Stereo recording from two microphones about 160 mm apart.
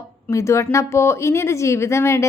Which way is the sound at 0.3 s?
20° left (ahead or behind).